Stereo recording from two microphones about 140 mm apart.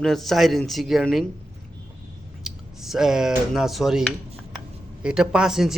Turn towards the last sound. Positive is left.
turn(degrees=-5)  # may be behind; listen again after turning